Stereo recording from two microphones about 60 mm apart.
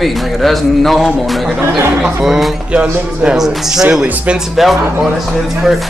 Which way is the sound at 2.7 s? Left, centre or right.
Centre.